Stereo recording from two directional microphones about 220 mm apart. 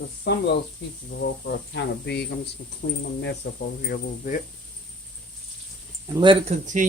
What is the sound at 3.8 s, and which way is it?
Speech, 40° left (ahead or behind).